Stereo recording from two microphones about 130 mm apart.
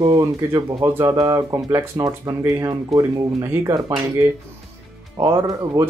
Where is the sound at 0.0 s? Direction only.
30° right (ahead or behind).